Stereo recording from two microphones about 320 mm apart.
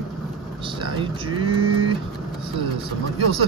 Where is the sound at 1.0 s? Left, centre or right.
Centre.